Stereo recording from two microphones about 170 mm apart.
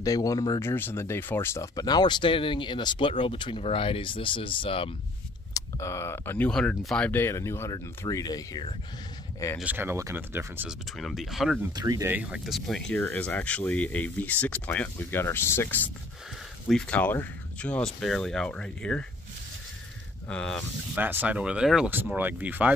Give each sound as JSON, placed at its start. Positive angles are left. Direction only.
{"t": 0.0, "sound": "speech", "side_deg": 20}
{"t": 5.5, "sound": "speech", "side_deg": 15}
{"t": 9.6, "sound": "speech", "side_deg": -10}
{"t": 11.0, "sound": "speech", "side_deg": 0}
{"t": 11.7, "sound": "speech", "side_deg": -20}
{"t": 20.2, "sound": "speech", "side_deg": 5}
{"t": 20.9, "sound": "speech", "side_deg": -10}